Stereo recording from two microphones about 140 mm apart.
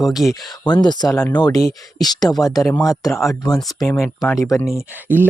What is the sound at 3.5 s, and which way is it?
Speech, centre (ahead or behind).